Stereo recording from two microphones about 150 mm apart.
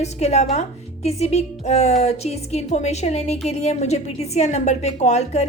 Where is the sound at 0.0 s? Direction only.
45° left (ahead or behind).